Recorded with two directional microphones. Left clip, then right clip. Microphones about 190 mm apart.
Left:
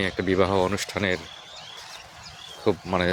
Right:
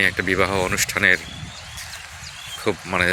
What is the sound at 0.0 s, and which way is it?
Speech, 15° left (ahead or behind).